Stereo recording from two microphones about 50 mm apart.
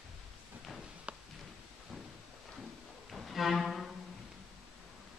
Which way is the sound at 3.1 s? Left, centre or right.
Centre.